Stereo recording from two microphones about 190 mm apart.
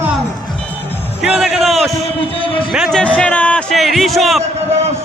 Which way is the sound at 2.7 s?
Centre (ahead or behind).